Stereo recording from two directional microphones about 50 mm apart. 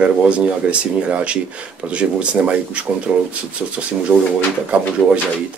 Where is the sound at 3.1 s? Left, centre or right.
Centre.